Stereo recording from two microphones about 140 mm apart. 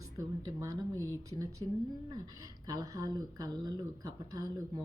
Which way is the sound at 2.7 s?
25° right (ahead or behind).